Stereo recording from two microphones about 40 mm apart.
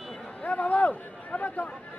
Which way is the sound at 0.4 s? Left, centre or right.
Left.